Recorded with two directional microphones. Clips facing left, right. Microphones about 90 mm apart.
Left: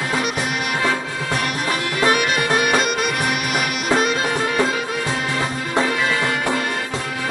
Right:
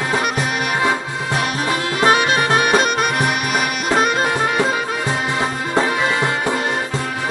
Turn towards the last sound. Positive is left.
turn(degrees=-25)  # may be behind; listen again after turning